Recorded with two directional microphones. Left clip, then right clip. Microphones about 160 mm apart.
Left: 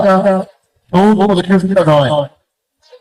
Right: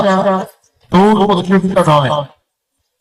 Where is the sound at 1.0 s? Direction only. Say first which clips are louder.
Even; 25° left (ahead or behind).